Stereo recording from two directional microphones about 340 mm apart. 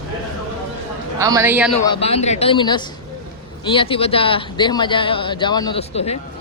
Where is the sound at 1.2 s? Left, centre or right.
Centre.